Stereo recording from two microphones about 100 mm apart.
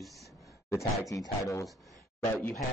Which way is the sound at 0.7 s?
30° left (ahead or behind).